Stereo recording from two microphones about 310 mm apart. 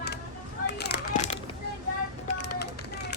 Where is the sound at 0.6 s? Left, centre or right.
Left.